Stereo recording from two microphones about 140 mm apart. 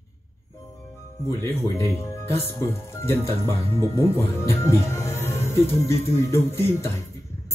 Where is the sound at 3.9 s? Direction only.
20° left (ahead or behind).